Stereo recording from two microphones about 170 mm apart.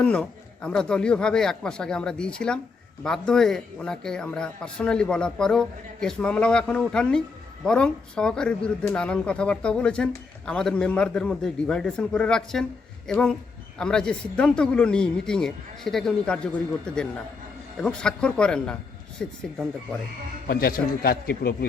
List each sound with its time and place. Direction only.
0.0 s speech: 5° left (ahead or behind)
20.5 s a man's voice: 60° left (ahead or behind)